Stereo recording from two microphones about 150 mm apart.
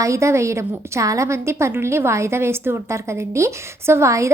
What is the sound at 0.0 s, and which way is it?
A woman's voice, 20° right (ahead or behind).